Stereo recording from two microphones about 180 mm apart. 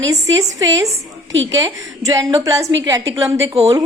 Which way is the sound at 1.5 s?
20° right (ahead or behind).